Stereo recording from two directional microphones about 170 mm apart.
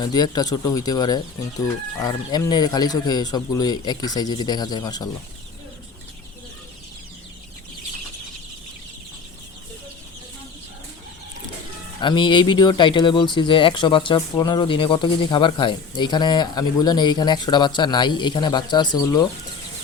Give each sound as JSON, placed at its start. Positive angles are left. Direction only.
{"t": 0.0, "sound": "speech", "side_deg": 25}
{"t": 11.9, "sound": "speech", "side_deg": 30}